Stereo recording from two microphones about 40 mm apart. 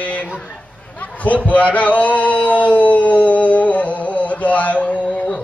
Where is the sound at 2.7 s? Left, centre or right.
Left.